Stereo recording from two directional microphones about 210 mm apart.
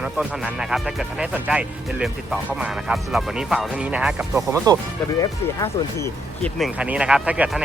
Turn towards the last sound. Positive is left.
turn(degrees=-5)  # may be behind; listen again after turning